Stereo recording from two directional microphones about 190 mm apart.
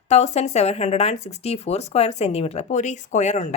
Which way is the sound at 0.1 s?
35° left (ahead or behind).